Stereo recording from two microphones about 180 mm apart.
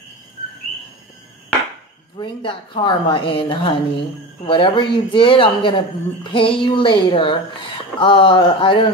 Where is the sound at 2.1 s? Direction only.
25° left (ahead or behind).